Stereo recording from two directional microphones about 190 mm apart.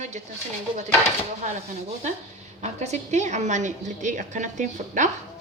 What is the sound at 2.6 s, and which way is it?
A woman's voice, 35° right (ahead or behind).